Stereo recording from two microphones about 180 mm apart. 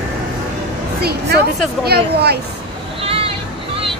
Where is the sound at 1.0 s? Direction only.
60° right (ahead or behind).